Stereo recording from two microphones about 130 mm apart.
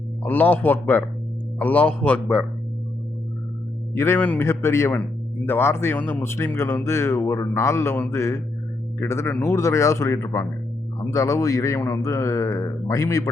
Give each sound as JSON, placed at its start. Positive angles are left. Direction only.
{"t": 0.2, "sound": "speech", "side_deg": 15}
{"t": 3.9, "sound": "speech", "side_deg": 20}